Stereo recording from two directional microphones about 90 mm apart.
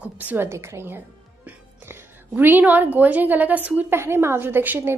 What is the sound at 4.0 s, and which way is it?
Speech, 30° right (ahead or behind).